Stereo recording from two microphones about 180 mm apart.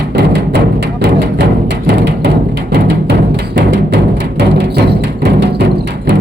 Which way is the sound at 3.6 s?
70° right (ahead or behind).